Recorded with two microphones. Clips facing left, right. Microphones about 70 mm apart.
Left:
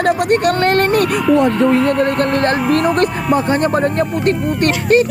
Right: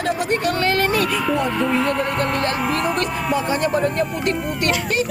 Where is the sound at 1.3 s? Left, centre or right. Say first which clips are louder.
Left 11 dB; centre.